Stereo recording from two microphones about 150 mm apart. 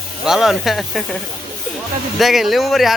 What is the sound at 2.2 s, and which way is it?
Speech, centre (ahead or behind).